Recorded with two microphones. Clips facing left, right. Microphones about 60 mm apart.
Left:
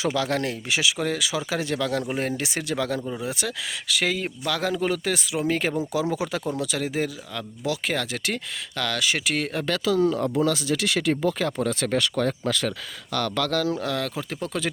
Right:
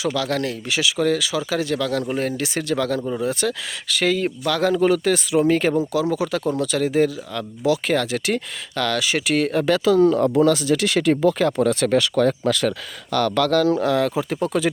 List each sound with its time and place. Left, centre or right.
0.0 s speech: left; by 5.7 s centre
5.9 s speech: left; by 9.6 s centre
9.8 s speech: right
11.2 s speech: right
13.8 s speech: right
14.4 s speech: centre